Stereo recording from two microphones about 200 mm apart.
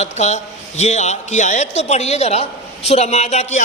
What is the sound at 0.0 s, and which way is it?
A man's voice, 35° left (ahead or behind).